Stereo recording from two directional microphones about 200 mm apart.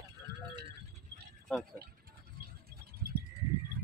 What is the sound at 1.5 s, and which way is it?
Speech, 5° left (ahead or behind).